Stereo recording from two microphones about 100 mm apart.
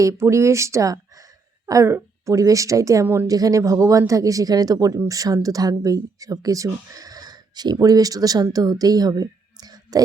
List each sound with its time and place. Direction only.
0.0 s a woman's voice: 30° right (ahead or behind)